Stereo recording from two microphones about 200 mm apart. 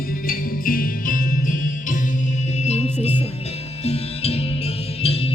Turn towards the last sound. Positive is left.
turn(degrees=30)  # may be behind; listen again after turning